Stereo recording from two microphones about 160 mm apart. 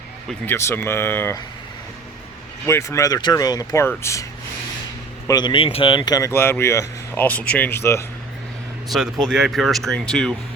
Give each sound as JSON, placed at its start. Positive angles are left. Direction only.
{"t": 0.4, "sound": "speech", "side_deg": 15}
{"t": 2.6, "sound": "speech", "side_deg": 15}
{"t": 5.3, "sound": "speech", "side_deg": 30}
{"t": 8.9, "sound": "speech", "side_deg": 0}